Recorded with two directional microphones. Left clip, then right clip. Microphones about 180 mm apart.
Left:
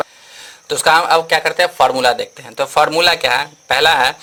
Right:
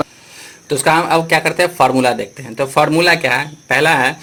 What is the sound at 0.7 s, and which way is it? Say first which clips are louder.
A man's voice: left 1 dB; 40° left (ahead or behind).